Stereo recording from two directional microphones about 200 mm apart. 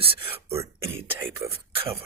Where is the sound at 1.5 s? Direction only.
30° right (ahead or behind).